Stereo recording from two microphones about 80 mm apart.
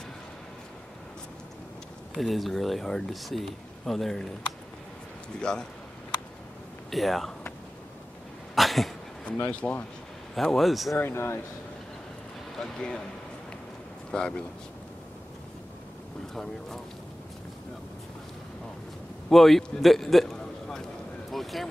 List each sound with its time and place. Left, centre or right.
2.1 s speech: centre
5.4 s speech: centre
6.9 s speech: centre
8.5 s dog: centre
9.5 s speech: centre
10.3 s speech: centre
11.0 s speech: left
12.5 s speech: centre
14.1 s speech: centre
19.2 s a man's voice: centre
21.3 s a sound: centre